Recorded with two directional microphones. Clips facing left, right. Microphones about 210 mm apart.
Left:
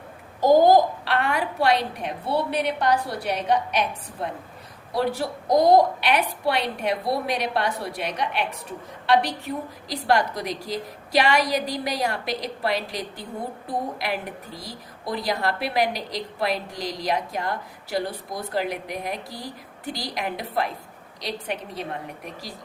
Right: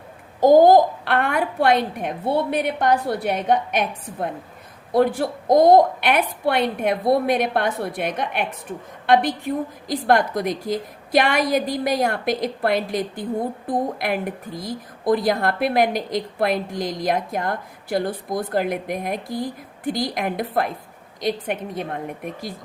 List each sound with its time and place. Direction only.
0.3 s a child's voice: 50° right (ahead or behind)